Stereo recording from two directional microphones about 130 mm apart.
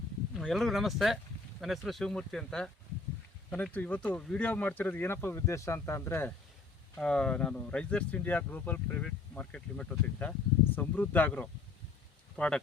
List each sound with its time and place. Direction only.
0.3 s speech: centre (ahead or behind); by 6.3 s 20° left (ahead or behind)
7.0 s speech: 5° left (ahead or behind)